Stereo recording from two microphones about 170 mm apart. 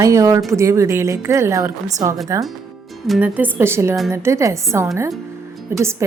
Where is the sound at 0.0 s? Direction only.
20° right (ahead or behind).